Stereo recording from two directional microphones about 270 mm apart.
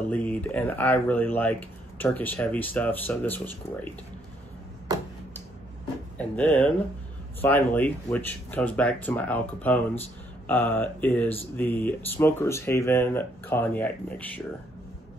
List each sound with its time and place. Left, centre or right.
0.1 s speech: centre
6.1 s speech: centre